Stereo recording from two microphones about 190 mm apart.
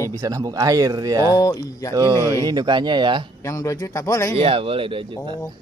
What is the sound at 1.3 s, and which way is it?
Speech, 20° left (ahead or behind).